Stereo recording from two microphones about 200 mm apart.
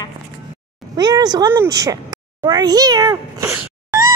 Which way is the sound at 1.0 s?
20° right (ahead or behind).